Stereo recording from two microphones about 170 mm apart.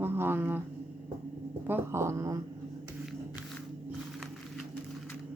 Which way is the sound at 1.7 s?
15° right (ahead or behind).